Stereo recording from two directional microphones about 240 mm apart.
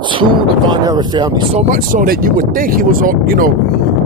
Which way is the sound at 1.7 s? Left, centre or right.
Right.